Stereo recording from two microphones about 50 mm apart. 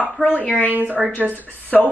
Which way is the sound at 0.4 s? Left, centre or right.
Left.